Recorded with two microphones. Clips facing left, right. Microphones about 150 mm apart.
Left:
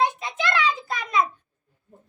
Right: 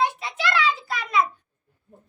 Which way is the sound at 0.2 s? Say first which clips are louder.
Even; 20° left (ahead or behind).